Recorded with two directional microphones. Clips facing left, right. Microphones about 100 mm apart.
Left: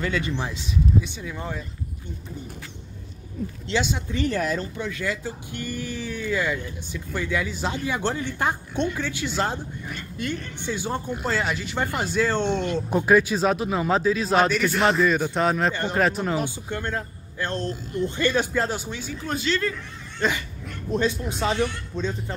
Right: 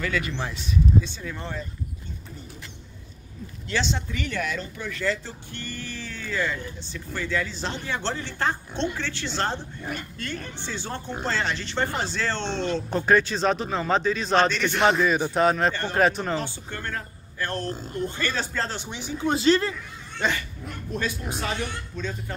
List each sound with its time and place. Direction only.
0.0 s speech: 25° left (ahead or behind); by 1.7 s 10° left (ahead or behind)
3.7 s speech: 25° left (ahead or behind)
4.1 s speech: 35° left (ahead or behind)
4.7 s speech: 15° left (ahead or behind)
16.4 s speech: 15° left (ahead or behind)
17.7 s speech: 45° right (ahead or behind)
18.1 s speech: 15° left (ahead or behind)
18.9 s speech: 20° right (ahead or behind)
20.2 s dog: 5° right (ahead or behind)
21.0 s speech: 25° left (ahead or behind)